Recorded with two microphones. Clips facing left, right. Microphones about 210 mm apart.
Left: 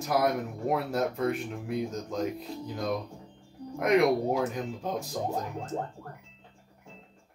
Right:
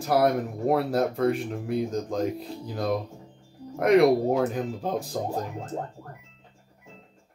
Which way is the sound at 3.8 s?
35° right (ahead or behind).